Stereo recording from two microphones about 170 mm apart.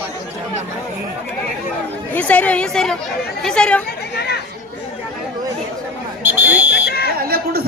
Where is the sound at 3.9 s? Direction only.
70° left (ahead or behind).